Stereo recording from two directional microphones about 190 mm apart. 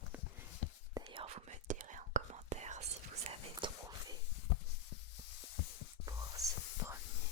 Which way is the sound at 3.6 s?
25° right (ahead or behind).